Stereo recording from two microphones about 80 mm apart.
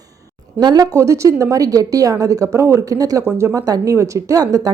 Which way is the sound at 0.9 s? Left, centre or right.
Right.